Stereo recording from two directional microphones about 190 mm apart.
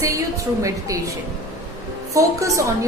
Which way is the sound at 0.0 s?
15° right (ahead or behind).